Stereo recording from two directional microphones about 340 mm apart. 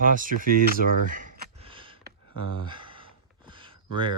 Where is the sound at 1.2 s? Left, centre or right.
Right.